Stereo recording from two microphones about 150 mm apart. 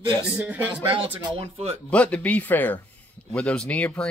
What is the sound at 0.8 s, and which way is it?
Speech, 35° right (ahead or behind).